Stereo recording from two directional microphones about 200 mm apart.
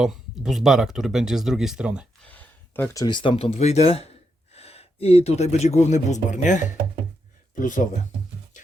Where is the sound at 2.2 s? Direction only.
10° left (ahead or behind); by 7.9 s 40° left (ahead or behind).